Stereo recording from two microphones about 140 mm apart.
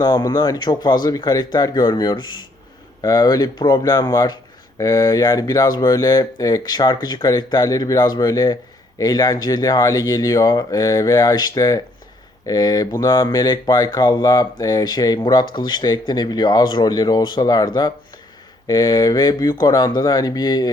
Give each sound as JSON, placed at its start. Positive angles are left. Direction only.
{"t": 0.0, "sound": "speech", "side_deg": 30}
{"t": 18.7, "sound": "speech", "side_deg": 25}